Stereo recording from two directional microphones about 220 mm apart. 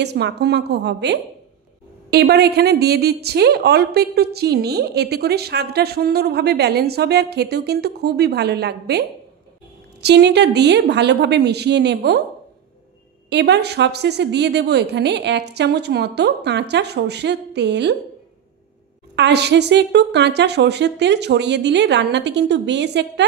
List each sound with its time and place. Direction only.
0.0 s a woman's voice: 50° right (ahead or behind)
10.0 s a woman's voice: 50° right (ahead or behind)
13.3 s a woman's voice: 50° right (ahead or behind)
19.1 s a woman's voice: 50° right (ahead or behind)